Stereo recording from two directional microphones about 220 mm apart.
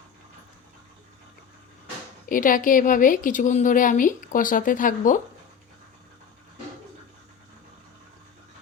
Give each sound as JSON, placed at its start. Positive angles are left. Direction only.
{"t": 2.3, "sound": "a woman's voice", "side_deg": 40}